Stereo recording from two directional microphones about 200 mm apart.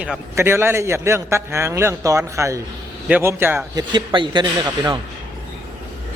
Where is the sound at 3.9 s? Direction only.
25° right (ahead or behind).